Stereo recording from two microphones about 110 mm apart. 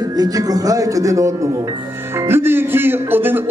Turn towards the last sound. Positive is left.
turn(degrees=-20)  # may be behind; listen again after turning